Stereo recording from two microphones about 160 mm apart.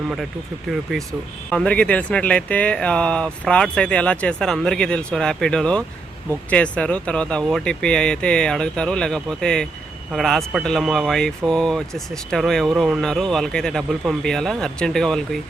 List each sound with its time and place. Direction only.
0.7 s speech: centre (ahead or behind)